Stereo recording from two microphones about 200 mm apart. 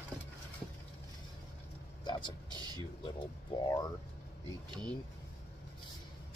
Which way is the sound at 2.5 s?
20° right (ahead or behind).